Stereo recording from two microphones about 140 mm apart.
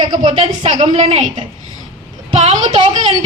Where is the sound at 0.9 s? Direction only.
50° right (ahead or behind).